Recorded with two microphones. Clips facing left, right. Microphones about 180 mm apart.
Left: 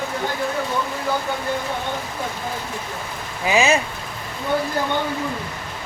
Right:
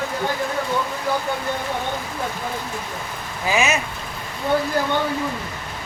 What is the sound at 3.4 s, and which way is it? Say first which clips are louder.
Speech: left 3 dB; 25° left (ahead or behind).